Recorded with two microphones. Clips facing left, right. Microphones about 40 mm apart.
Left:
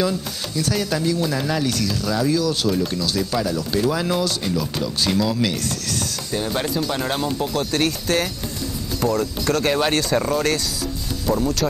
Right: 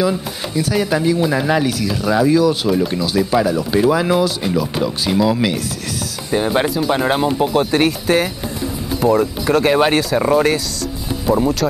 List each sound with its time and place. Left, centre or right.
0.7 s speech: centre